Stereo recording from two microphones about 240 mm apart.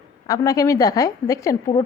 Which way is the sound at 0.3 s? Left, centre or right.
Centre.